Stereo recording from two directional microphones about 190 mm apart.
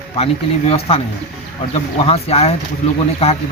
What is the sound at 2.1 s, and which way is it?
A man's voice, 30° left (ahead or behind).